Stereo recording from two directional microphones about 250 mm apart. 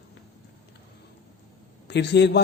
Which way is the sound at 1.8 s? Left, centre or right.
Left.